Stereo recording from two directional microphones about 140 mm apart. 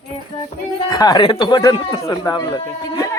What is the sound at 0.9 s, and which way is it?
A man's voice, 30° left (ahead or behind).